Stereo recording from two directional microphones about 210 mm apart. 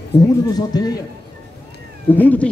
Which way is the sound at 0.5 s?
20° left (ahead or behind).